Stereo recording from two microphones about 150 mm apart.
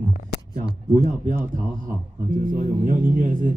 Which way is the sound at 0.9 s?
60° right (ahead or behind).